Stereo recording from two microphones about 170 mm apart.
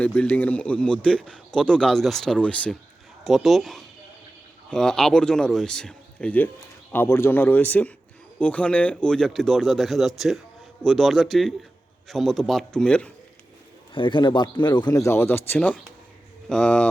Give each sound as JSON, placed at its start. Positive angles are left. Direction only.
{"t": 0.0, "sound": "a man's voice", "side_deg": 10}
{"t": 13.9, "sound": "speech", "side_deg": 30}